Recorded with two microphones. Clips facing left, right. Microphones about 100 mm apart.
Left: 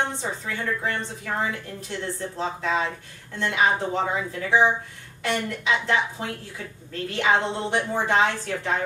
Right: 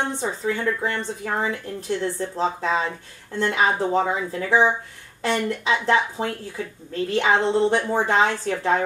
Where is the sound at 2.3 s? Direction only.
35° right (ahead or behind).